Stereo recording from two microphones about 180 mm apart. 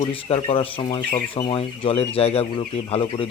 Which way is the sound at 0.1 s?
30° left (ahead or behind).